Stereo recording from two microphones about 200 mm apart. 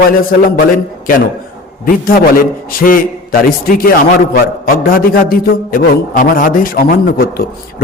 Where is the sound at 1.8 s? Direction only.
45° left (ahead or behind).